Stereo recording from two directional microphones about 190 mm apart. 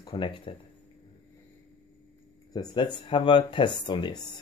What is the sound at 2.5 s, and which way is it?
Speech, 20° left (ahead or behind).